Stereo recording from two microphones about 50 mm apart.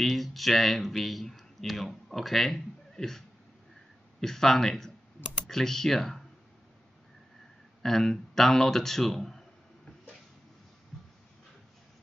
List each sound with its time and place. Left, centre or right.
0.0 s speech: centre
7.8 s speech: centre